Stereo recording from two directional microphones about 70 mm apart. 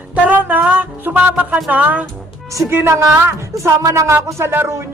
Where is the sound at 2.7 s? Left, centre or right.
Right.